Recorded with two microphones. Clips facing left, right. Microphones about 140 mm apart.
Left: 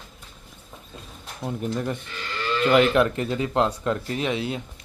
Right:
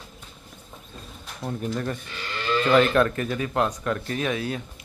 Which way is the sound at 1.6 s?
15° left (ahead or behind).